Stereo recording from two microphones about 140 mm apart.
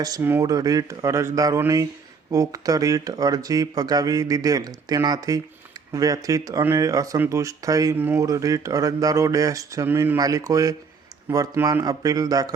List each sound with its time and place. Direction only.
0.0 s speech: 25° right (ahead or behind)